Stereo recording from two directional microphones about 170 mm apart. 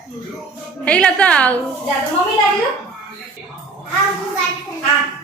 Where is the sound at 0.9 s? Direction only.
5° left (ahead or behind).